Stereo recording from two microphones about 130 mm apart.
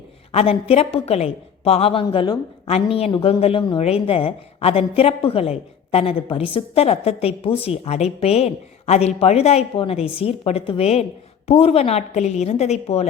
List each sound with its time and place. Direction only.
0.3 s a woman's voice: 50° left (ahead or behind)
2.6 s a woman's voice: 50° left (ahead or behind)